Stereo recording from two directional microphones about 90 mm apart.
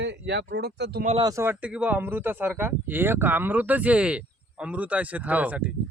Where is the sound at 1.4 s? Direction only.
25° right (ahead or behind).